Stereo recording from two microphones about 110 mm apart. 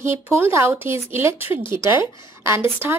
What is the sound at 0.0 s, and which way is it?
A woman's voice, 25° right (ahead or behind).